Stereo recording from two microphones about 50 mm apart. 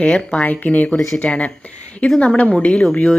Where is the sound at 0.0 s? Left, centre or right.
Left.